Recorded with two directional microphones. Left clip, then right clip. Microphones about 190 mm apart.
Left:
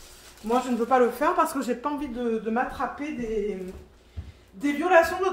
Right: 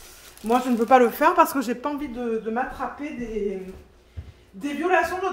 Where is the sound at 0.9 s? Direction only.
50° right (ahead or behind).